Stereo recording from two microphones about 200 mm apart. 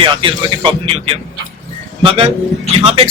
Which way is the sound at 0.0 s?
25° right (ahead or behind).